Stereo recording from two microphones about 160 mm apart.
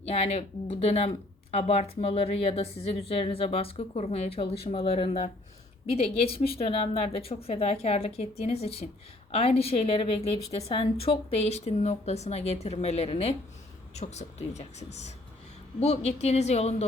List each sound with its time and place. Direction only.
0.0 s speech: 40° left (ahead or behind)